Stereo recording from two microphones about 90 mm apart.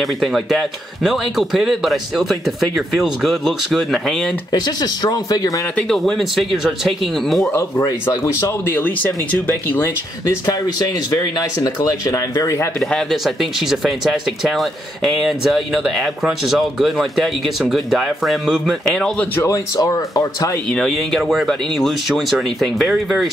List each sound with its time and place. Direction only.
0.0 s speech: centre (ahead or behind)
4.5 s speech: 50° left (ahead or behind)
5.8 s speech: 5° left (ahead or behind)
8.4 s speech: 25° left (ahead or behind)
11.6 s speech: 40° left (ahead or behind)
13.1 s speech: 5° right (ahead or behind)
19.4 s speech: 40° left (ahead or behind)
20.7 s speech: 5° left (ahead or behind)